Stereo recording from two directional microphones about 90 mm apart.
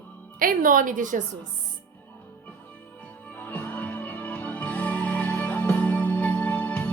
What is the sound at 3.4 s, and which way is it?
Music, 20° left (ahead or behind).